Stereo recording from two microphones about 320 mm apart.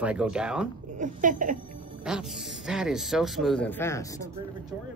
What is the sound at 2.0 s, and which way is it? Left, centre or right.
Speech, centre.